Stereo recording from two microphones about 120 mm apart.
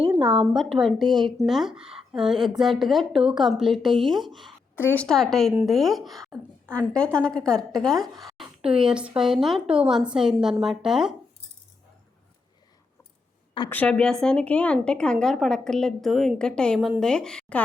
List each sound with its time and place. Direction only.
0.3 s a woman's voice: 5° right (ahead or behind)
4.7 s a woman's voice: 15° left (ahead or behind)
5.0 s a woman's voice: 5° left (ahead or behind)
13.7 s a woman's voice: 15° left (ahead or behind)